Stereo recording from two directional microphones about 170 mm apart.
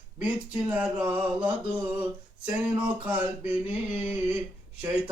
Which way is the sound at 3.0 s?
10° right (ahead or behind).